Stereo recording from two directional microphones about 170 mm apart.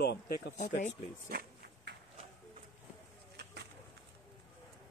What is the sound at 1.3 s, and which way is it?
Insect, 65° right (ahead or behind).